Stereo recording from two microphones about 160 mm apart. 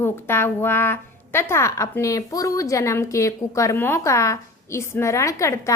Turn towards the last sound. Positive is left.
turn(degrees=20)  # may be behind; listen again after turning